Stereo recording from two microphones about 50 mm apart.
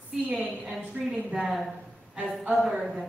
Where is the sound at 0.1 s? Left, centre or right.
Right.